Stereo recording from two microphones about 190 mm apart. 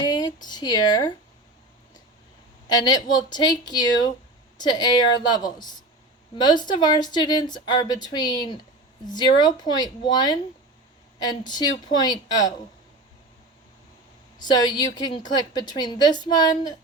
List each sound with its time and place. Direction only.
0.0 s speech: 20° left (ahead or behind)
2.6 s a woman's voice: 20° left (ahead or behind)
14.3 s a woman's voice: 20° left (ahead or behind)